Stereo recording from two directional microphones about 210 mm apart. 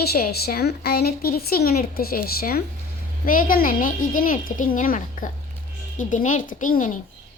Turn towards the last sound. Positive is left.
turn(degrees=40)  # may be behind; listen again after turning